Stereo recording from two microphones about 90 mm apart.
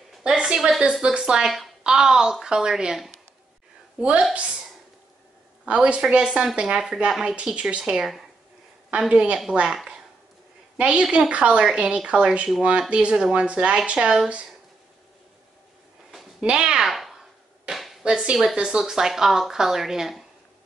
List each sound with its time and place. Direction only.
0.2 s a woman's voice: 10° right (ahead or behind)
5.7 s a woman's voice: 10° right (ahead or behind)
16.3 s a sound: 10° right (ahead or behind)
18.0 s speech: 15° right (ahead or behind)